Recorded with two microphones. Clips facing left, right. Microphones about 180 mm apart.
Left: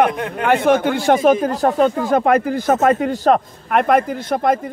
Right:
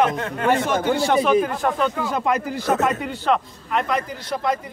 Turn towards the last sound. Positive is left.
turn(degrees=50)  # may be behind; listen again after turning